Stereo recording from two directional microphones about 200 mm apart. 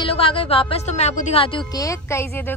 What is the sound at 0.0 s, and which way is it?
Speech, 25° left (ahead or behind).